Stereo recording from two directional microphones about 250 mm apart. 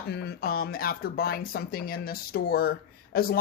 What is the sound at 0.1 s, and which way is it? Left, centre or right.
Speech, left.